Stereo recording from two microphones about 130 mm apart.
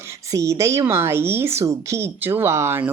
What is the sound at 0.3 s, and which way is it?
Speech, 25° right (ahead or behind).